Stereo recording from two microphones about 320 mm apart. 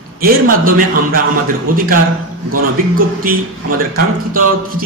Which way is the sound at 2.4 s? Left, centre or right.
Right.